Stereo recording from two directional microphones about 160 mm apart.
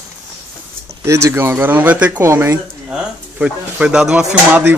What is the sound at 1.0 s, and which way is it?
Speech, 20° right (ahead or behind).